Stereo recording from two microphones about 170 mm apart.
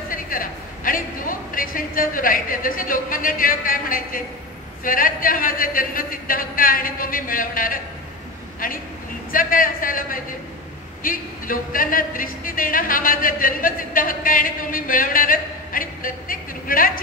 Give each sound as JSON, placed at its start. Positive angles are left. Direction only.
{"t": 0.1, "sound": "speech", "side_deg": 55}
{"t": 9.3, "sound": "speech", "side_deg": 55}